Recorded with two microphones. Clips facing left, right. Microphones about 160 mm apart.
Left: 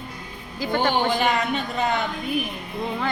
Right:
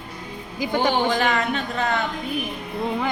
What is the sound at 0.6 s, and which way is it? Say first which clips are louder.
Speech: right 1 dB; 15° right (ahead or behind).